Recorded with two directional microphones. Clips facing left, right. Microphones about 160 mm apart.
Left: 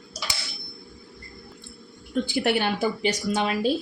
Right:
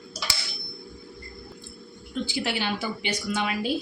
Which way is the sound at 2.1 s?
55° left (ahead or behind).